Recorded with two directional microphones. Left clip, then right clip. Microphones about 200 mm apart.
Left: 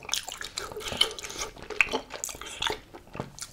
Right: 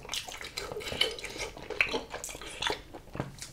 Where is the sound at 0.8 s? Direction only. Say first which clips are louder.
Left 4 dB; 30° left (ahead or behind).